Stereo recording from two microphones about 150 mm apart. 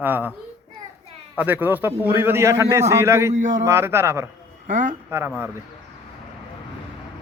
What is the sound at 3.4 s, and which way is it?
Speech, 55° right (ahead or behind).